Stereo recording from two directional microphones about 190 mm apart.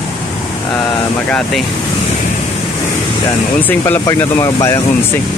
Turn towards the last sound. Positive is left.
turn(degrees=15)  # may be behind; listen again after turning